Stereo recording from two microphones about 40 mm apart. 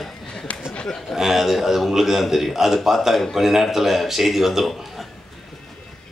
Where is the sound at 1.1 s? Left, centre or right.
Centre.